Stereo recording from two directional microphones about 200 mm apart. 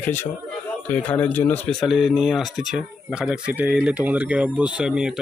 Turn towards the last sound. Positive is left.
turn(degrees=-5)  # may be behind; listen again after turning